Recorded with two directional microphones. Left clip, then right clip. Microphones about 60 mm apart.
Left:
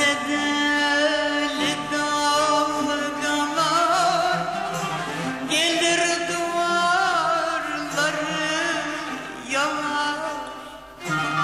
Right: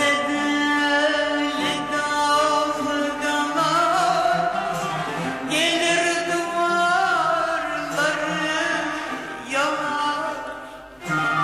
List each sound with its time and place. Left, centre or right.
0.0 s music: left
5.5 s music: left
8.0 s music: left